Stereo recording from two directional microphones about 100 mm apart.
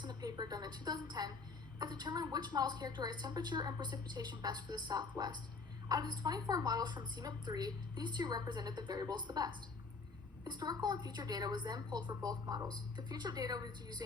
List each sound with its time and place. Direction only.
0.0 s a woman's voice: 40° right (ahead or behind)